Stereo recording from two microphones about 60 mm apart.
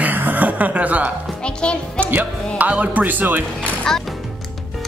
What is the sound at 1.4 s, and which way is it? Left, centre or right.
Speech, centre.